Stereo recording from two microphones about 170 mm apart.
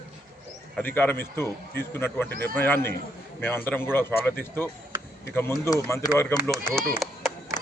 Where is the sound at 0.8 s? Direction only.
10° left (ahead or behind).